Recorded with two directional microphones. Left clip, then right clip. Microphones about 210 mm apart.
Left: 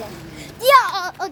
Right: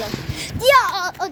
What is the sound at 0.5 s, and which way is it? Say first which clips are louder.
Speech: left 1 dB; 5° left (ahead or behind).